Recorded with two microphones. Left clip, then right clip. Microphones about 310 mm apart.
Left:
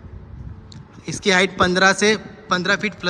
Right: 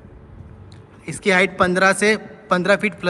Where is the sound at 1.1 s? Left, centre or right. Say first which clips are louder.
Even; centre.